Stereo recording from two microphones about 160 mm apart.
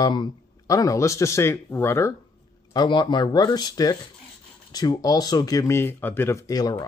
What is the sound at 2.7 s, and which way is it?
Speech, 30° left (ahead or behind).